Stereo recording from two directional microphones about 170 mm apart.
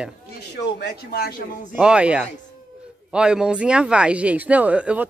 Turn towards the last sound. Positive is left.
turn(degrees=-5)  # may be behind; listen again after turning